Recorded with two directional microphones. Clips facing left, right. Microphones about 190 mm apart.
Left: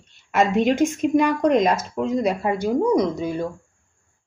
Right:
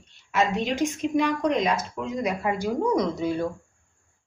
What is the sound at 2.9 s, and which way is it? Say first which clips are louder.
Speech: left 4 dB; 15° left (ahead or behind).